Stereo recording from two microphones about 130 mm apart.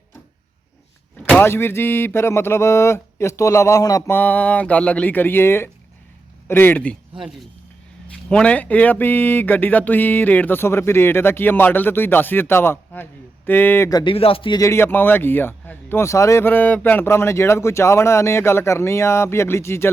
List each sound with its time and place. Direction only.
1.4 s speech: 15° left (ahead or behind)
4.1 s speech: 15° left (ahead or behind)
8.1 s speech: 5° left (ahead or behind)
14.0 s speech: 45° left (ahead or behind)
14.6 s speech: 20° left (ahead or behind)